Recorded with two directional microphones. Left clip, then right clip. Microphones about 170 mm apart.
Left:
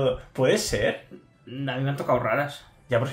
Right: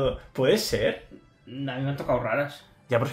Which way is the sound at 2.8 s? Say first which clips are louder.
Even; 35° right (ahead or behind).